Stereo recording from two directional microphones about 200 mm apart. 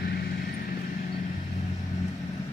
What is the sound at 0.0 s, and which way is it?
Vehicle, 55° left (ahead or behind).